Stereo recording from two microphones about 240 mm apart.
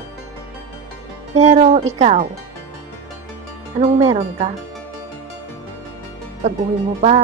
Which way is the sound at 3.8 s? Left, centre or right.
Right.